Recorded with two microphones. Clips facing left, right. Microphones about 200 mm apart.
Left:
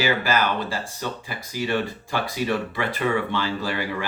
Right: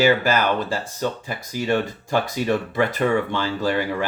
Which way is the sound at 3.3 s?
45° right (ahead or behind).